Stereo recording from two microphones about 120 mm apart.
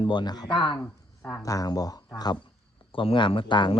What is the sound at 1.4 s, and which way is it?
Speech, 30° left (ahead or behind).